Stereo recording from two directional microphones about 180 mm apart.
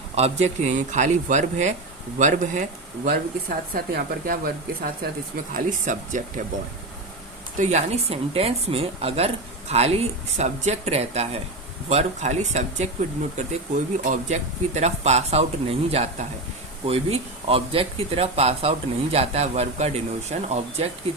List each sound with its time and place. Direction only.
0.2 s speech: 40° right (ahead or behind)
7.6 s speech: 40° right (ahead or behind)